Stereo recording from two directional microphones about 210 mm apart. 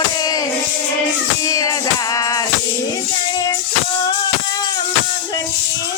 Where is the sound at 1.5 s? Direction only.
15° left (ahead or behind).